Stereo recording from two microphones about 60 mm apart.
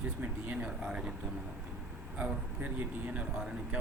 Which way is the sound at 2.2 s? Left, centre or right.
Right.